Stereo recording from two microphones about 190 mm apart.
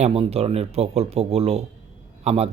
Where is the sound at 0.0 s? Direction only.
30° right (ahead or behind).